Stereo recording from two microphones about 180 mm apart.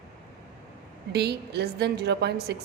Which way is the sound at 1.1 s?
65° right (ahead or behind).